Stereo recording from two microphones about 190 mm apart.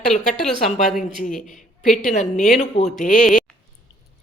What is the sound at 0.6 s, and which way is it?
A woman's voice, 40° left (ahead or behind).